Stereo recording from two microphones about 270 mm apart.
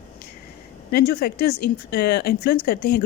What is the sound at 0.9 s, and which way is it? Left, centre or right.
Speech, left.